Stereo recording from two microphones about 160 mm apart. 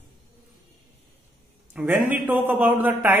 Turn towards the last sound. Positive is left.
turn(degrees=-10)  # may be behind; listen again after turning